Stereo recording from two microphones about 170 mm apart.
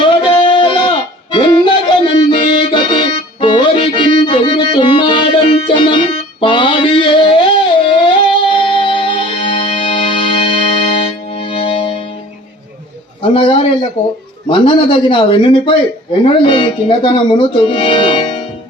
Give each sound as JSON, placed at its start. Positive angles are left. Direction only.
{"t": 0.0, "sound": "music", "side_deg": 30}
{"t": 1.3, "sound": "accordion", "side_deg": 30}
{"t": 2.3, "sound": "music", "side_deg": 30}
{"t": 13.3, "sound": "a sound", "side_deg": 30}
{"t": 14.0, "sound": "speech", "side_deg": 30}